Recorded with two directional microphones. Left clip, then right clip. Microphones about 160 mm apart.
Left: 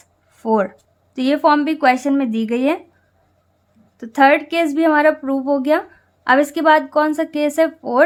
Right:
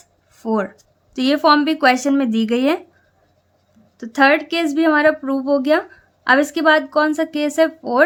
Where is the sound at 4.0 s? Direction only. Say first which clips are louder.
Left 1 dB; 10° left (ahead or behind).